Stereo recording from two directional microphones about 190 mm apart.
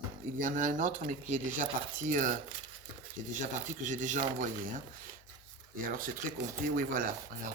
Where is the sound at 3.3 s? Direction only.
40° right (ahead or behind).